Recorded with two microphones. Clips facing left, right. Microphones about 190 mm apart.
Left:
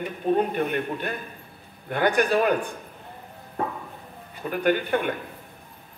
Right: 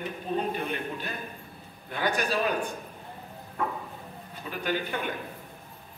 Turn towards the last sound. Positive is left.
turn(degrees=55)  # may be behind; listen again after turning